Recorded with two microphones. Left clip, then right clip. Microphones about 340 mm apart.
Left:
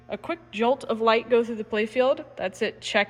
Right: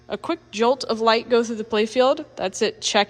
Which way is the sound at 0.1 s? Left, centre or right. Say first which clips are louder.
Right 4 dB; centre.